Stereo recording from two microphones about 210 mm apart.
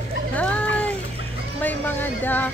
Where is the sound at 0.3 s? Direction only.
5° left (ahead or behind).